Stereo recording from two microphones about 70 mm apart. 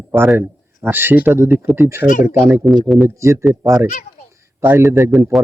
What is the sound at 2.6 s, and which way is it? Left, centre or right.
Speech, centre.